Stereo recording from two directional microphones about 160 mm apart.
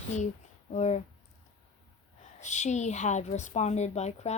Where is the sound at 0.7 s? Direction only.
45° left (ahead or behind).